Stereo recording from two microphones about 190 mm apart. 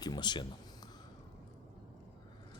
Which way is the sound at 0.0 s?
20° left (ahead or behind).